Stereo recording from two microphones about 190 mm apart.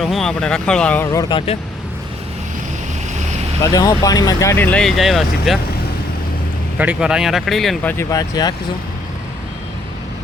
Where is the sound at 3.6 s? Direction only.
20° left (ahead or behind); by 5.5 s centre (ahead or behind).